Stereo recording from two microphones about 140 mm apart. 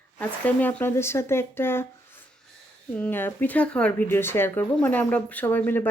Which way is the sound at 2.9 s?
10° left (ahead or behind).